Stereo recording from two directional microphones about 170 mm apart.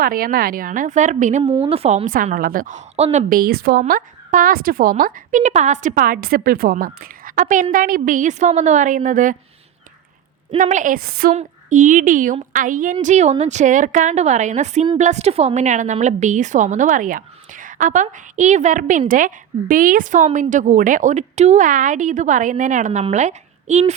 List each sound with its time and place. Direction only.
0.0 s a woman's voice: 60° right (ahead or behind); by 2.0 s 35° right (ahead or behind)
2.0 s a woman's voice: 55° right (ahead or behind)
10.6 s a woman's voice: 50° right (ahead or behind); by 11.3 s 65° right (ahead or behind)
11.3 s a woman's voice: 50° right (ahead or behind)